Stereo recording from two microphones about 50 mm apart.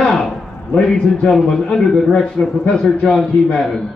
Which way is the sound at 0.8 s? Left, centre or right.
Centre.